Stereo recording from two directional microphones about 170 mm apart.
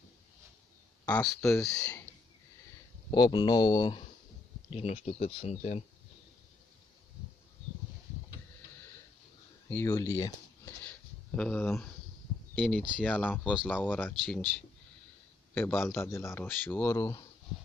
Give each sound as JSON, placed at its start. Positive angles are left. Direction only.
{"t": 1.0, "sound": "speech", "side_deg": 10}
{"t": 3.1, "sound": "speech", "side_deg": 25}
{"t": 4.6, "sound": "speech", "side_deg": 40}
{"t": 9.7, "sound": "speech", "side_deg": 15}
{"t": 15.5, "sound": "speech", "side_deg": 15}